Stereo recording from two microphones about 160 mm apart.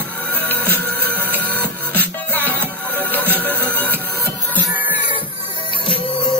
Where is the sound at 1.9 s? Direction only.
10° left (ahead or behind).